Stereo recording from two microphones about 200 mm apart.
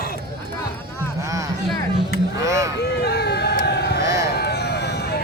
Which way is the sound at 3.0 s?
55° left (ahead or behind).